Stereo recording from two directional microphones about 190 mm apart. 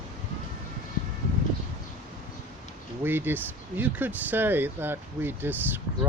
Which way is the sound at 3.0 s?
10° right (ahead or behind).